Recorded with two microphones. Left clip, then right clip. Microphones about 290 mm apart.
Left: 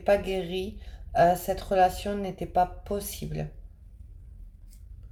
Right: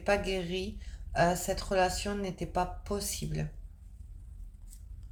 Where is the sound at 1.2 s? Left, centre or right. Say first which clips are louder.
Left 6 dB; right.